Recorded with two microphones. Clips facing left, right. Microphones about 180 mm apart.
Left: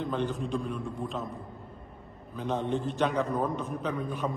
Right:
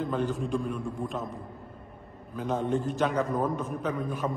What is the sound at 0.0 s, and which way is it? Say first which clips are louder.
A man's voice: right 2 dB; centre (ahead or behind).